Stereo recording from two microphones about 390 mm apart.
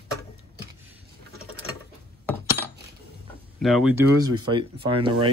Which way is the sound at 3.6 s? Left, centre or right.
Centre.